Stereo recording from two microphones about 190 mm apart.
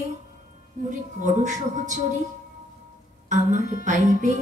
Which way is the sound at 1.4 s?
40° right (ahead or behind).